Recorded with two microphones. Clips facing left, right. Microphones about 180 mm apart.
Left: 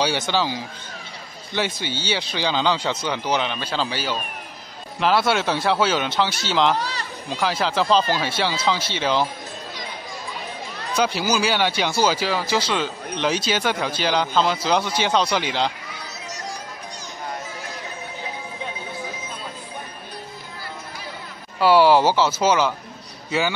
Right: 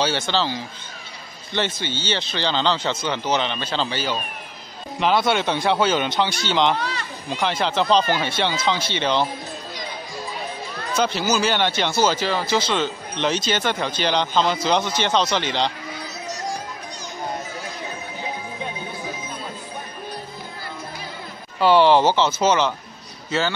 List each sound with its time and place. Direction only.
0.0 s speech: 15° left (ahead or behind)
6.8 s a sound: 35° left (ahead or behind)
7.2 s speech: 5° left (ahead or behind)
10.9 s speech: 10° left (ahead or behind)
21.5 s speech: 5° left (ahead or behind)